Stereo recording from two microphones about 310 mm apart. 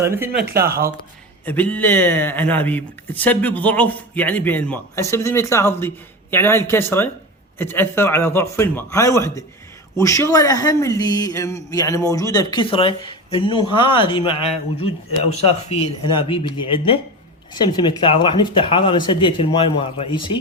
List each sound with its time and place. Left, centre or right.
0.0 s speech: centre
0.5 s speech: right
1.5 s speech: centre